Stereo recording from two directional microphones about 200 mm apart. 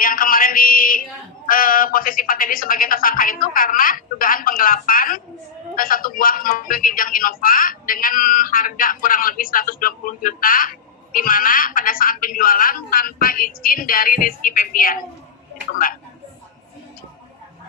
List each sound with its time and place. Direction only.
0.0 s speech: 45° left (ahead or behind)